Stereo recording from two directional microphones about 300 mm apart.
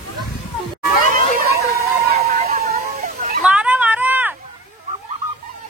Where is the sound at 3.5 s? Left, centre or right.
Centre.